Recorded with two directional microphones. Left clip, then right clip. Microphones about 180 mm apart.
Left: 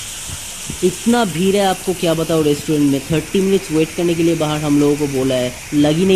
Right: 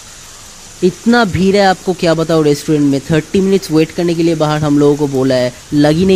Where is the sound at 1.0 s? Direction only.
45° right (ahead or behind).